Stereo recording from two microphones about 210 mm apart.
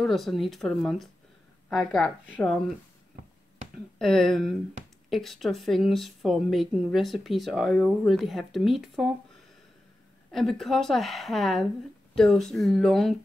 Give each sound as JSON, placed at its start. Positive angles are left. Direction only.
{"t": 0.0, "sound": "speech", "side_deg": 0}
{"t": 3.7, "sound": "speech", "side_deg": 0}
{"t": 10.3, "sound": "speech", "side_deg": 0}